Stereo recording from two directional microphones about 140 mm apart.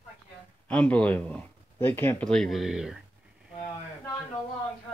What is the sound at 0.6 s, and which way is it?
Speech, 10° left (ahead or behind).